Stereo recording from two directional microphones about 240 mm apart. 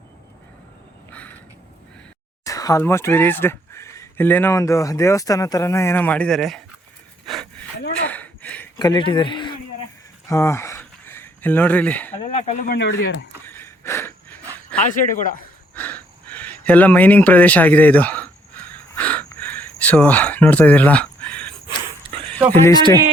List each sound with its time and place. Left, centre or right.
1.1 s a sound: centre
2.4 s speech: centre
7.3 s a sound: centre
12.2 s speech: left
12.7 s speech: left
13.4 s wheeze: centre
14.8 s speech: left
15.7 s a sound: centre
22.6 s speech: centre